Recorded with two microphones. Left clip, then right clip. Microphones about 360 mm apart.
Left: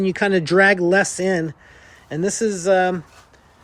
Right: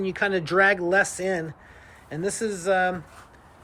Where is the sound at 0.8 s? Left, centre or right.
Left.